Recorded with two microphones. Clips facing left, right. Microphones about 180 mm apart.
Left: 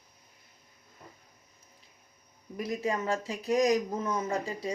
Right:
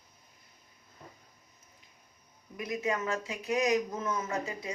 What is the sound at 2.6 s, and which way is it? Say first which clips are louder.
Speech: left 1 dB; 35° left (ahead or behind).